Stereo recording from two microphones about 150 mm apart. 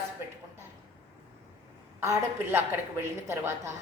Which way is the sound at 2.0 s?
15° right (ahead or behind).